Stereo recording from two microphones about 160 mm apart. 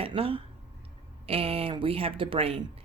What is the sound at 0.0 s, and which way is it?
Speech, 35° right (ahead or behind).